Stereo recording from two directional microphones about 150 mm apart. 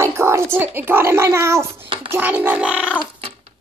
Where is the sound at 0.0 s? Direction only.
15° right (ahead or behind).